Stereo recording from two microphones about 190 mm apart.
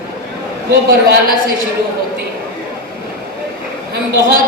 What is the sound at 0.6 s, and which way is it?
Speech, 55° right (ahead or behind).